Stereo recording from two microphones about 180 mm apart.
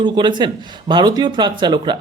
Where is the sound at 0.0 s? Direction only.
25° right (ahead or behind).